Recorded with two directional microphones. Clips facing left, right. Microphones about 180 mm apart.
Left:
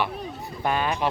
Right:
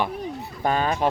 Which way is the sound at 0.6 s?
40° right (ahead or behind).